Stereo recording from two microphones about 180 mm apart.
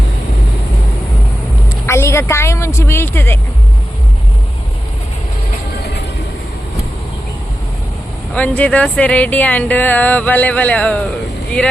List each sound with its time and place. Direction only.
1.9 s speech: 15° left (ahead or behind)
8.3 s speech: 10° left (ahead or behind)